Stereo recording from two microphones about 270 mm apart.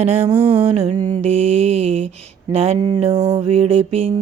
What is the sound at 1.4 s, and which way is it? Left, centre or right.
Mantra, right.